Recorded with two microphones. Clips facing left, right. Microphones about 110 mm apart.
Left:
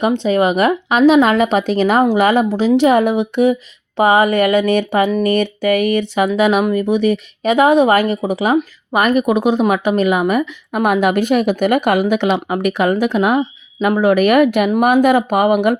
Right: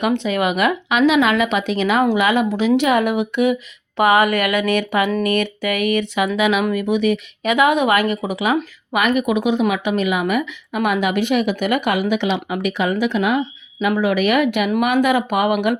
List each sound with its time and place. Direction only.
0.0 s speech: 30° left (ahead or behind)